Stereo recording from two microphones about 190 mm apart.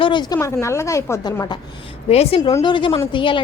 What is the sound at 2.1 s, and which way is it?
A woman's voice, 30° left (ahead or behind).